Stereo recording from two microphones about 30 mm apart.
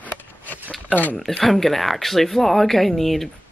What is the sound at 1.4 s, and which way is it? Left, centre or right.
Speech, centre.